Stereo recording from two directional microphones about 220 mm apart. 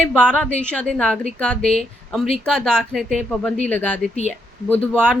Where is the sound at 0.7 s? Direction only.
5° left (ahead or behind).